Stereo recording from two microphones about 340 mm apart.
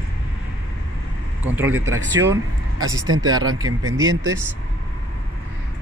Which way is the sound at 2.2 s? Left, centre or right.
Right.